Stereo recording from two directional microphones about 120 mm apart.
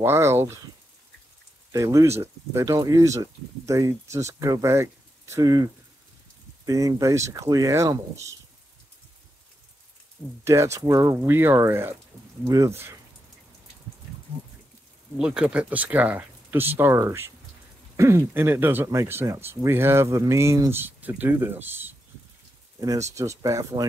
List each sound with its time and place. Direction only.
0.0 s speech: 20° right (ahead or behind)
1.7 s speech: 25° right (ahead or behind)
10.4 s speech: 25° right (ahead or behind)
11.1 s speech: 15° right (ahead or behind)
15.1 s speech: 10° right (ahead or behind)
22.8 s speech: 25° right (ahead or behind)